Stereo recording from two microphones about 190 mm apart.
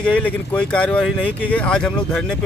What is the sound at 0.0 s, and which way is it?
Speech, 5° left (ahead or behind).